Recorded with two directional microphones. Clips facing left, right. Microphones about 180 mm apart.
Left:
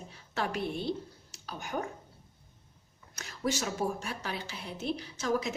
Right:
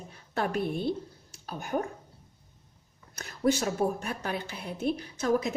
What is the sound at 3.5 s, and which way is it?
A woman's voice, 55° right (ahead or behind).